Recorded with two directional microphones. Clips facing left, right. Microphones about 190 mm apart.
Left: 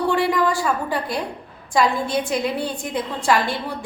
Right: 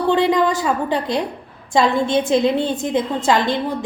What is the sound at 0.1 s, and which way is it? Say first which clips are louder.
A woman's voice: right 7 dB; 20° right (ahead or behind).